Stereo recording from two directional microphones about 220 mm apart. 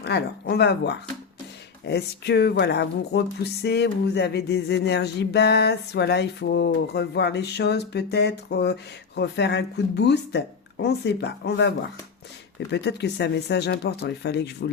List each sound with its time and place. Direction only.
0.0 s speech: 50° left (ahead or behind)